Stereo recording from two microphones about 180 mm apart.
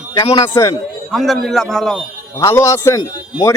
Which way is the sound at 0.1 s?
25° left (ahead or behind).